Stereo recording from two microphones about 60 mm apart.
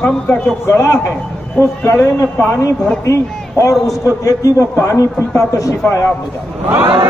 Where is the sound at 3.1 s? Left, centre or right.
Left.